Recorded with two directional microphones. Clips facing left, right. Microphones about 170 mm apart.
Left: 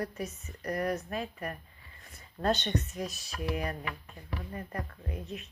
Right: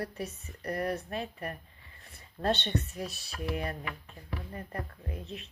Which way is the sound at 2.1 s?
30° right (ahead or behind).